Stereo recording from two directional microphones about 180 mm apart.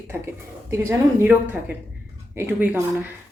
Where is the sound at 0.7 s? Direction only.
15° right (ahead or behind).